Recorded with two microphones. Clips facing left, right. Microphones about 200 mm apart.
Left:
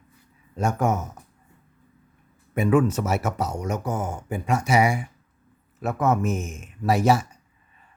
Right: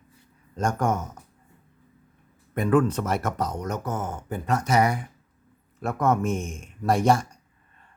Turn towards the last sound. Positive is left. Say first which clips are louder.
# left 1 dB
turn(degrees=5)  # may be behind; listen again after turning